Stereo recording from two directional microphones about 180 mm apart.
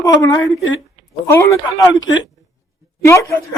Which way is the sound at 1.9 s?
20° left (ahead or behind).